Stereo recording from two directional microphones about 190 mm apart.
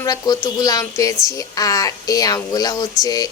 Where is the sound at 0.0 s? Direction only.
20° left (ahead or behind).